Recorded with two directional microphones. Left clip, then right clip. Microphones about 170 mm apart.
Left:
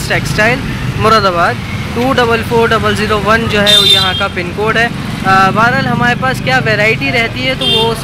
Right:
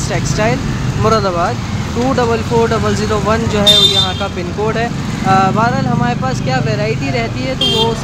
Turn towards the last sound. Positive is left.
turn(degrees=-10)  # may be behind; listen again after turning